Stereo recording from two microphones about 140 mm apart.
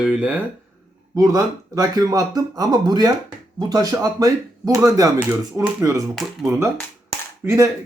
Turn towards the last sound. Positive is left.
turn(degrees=-20)  # may be behind; listen again after turning